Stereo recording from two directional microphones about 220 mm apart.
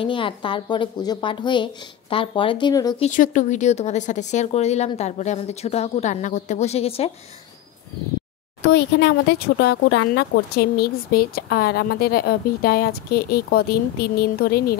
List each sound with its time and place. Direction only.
0.0 s speech: 25° left (ahead or behind)
3.0 s speech: 35° left (ahead or behind)
8.6 s speech: 50° left (ahead or behind)